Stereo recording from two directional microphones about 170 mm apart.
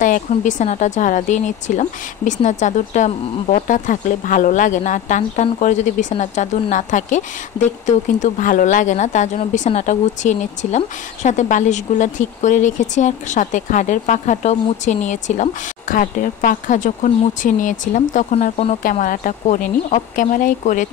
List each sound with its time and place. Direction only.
0.3 s speech: 45° left (ahead or behind)